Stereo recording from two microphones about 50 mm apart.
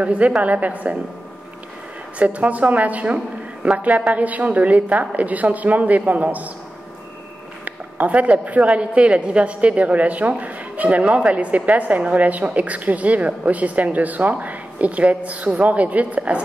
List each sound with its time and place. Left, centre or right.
0.0 s a woman's voice: right
2.1 s a woman's voice: right
7.6 s a woman's voice: right